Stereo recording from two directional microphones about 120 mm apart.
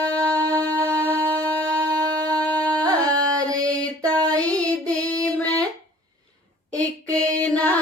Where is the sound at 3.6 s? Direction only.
10° left (ahead or behind).